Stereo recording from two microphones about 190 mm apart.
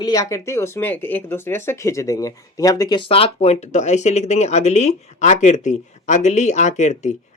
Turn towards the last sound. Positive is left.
turn(degrees=35)  # may be behind; listen again after turning